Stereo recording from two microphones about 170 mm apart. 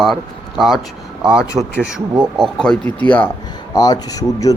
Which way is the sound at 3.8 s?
20° left (ahead or behind).